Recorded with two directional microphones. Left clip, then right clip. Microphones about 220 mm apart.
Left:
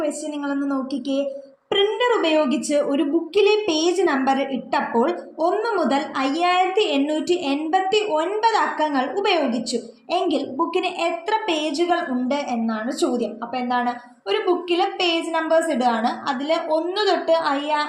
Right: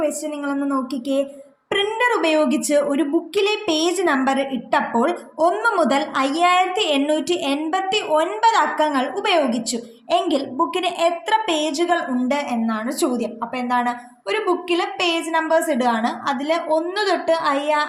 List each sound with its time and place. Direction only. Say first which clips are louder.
0.0 s a woman's voice: right 2 dB; 25° right (ahead or behind)